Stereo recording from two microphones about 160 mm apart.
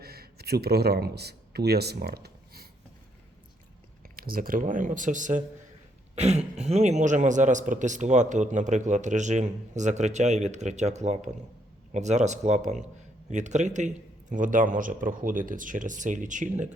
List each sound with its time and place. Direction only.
0.0 s speech: 75° right (ahead or behind)
4.0 s a man's voice: 65° right (ahead or behind)
6.1 s a man's voice: 40° right (ahead or behind)